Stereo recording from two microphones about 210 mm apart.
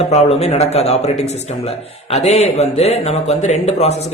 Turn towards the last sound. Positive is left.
turn(degrees=30)  # may be behind; listen again after turning